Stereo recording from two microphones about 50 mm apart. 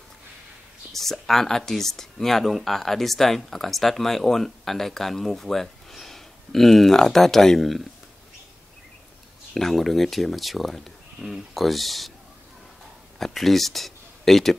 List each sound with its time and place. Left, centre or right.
0.9 s speech: centre
9.5 s speech: centre
13.2 s speech: centre